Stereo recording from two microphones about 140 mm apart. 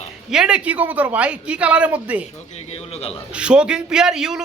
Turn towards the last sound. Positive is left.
turn(degrees=-5)  # may be behind; listen again after turning